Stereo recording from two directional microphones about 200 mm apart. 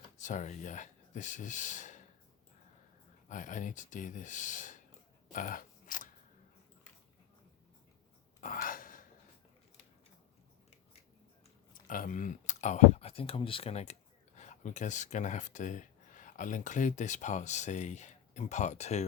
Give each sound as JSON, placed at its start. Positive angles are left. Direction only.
{"t": 0.2, "sound": "speech", "side_deg": 40}
{"t": 3.2, "sound": "speech", "side_deg": 40}
{"t": 5.3, "sound": "scissors", "side_deg": 40}
{"t": 8.4, "sound": "a sound", "side_deg": 45}
{"t": 11.7, "sound": "speech", "side_deg": 45}